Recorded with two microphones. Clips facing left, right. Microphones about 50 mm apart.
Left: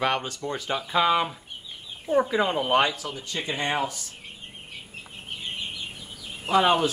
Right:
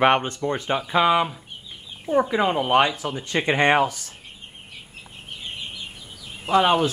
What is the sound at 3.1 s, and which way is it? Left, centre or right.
Speech, right.